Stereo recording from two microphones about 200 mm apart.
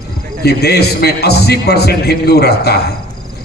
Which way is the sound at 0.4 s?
50° left (ahead or behind).